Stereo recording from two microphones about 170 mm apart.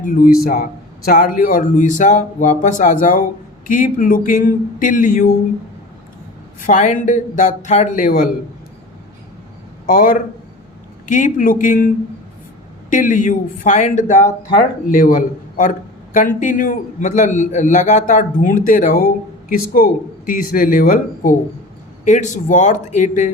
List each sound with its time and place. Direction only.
0.0 s a man's voice: 50° left (ahead or behind)
6.6 s a man's voice: 45° left (ahead or behind)
9.8 s a man's voice: 55° left (ahead or behind)
12.9 s a man's voice: 50° left (ahead or behind)